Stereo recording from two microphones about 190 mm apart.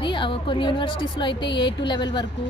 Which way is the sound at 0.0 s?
25° left (ahead or behind).